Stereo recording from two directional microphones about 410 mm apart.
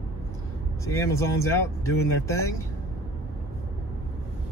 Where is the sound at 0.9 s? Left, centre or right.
Centre.